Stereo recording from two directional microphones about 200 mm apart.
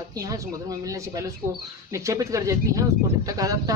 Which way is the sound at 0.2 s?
15° right (ahead or behind).